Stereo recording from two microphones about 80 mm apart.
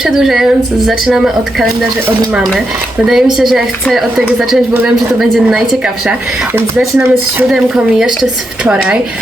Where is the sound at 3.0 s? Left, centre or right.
Centre.